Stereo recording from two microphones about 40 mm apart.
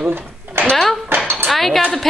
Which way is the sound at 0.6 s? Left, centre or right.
Right.